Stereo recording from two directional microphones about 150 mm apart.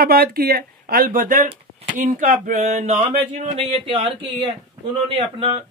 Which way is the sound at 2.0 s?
60° right (ahead or behind).